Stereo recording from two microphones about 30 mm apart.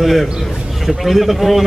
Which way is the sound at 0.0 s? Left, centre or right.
Centre.